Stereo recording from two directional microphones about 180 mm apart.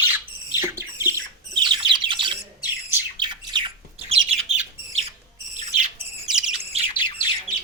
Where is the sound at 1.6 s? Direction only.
25° right (ahead or behind).